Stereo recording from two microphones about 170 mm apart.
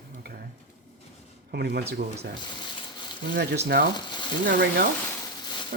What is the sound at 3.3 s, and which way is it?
Speech, 75° right (ahead or behind).